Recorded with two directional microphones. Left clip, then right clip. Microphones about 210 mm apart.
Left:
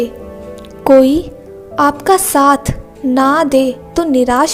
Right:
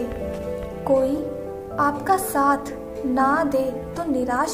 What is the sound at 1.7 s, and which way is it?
A woman's voice, 40° left (ahead or behind).